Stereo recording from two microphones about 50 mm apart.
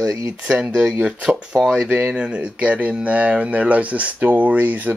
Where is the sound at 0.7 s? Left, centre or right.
Centre; by 4.9 s right.